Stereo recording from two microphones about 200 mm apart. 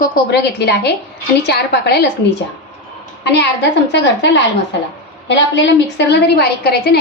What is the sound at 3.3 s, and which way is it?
A woman's voice, 60° left (ahead or behind).